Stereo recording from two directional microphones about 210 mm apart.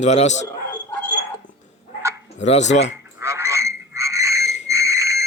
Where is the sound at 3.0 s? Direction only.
15° right (ahead or behind).